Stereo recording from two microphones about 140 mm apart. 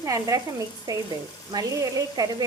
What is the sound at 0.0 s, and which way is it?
Speech, 25° right (ahead or behind).